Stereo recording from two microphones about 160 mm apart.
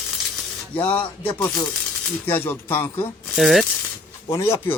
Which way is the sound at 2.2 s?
15° left (ahead or behind).